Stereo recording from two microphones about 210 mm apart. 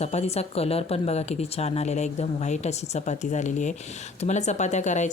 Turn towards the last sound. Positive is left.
turn(degrees=35)  # may be behind; listen again after turning